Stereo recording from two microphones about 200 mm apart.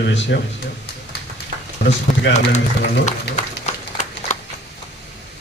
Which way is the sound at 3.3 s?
60° left (ahead or behind).